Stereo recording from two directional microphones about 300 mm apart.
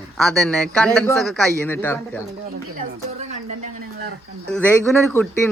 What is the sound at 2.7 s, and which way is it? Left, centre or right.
Speech, right.